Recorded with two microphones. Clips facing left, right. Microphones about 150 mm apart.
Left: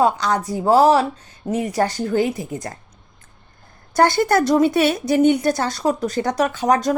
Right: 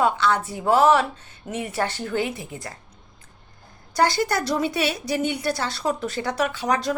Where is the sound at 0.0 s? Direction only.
40° left (ahead or behind).